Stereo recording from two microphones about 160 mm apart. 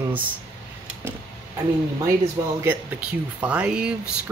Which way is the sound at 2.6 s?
10° right (ahead or behind).